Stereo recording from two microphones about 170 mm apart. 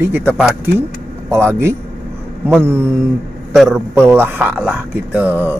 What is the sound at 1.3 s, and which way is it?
Speech, 15° right (ahead or behind).